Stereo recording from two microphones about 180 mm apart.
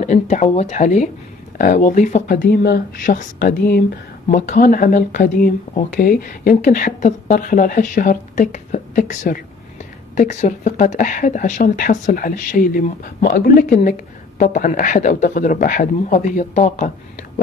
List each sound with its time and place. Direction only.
0.0 s speech: 40° left (ahead or behind); by 3.8 s 60° left (ahead or behind)
4.3 s speech: 45° left (ahead or behind)